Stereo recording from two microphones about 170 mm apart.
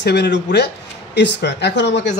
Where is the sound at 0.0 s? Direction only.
85° left.